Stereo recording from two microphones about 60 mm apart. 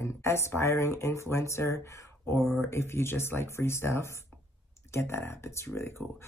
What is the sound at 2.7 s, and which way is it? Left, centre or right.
Speech, left.